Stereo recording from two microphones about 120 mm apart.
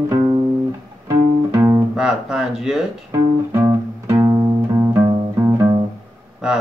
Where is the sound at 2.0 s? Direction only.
5° right (ahead or behind).